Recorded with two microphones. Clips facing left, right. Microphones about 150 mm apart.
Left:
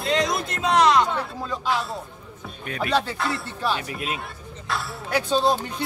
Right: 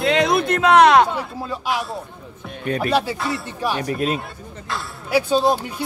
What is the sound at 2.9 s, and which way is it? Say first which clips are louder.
Speech: even; 10° right (ahead or behind).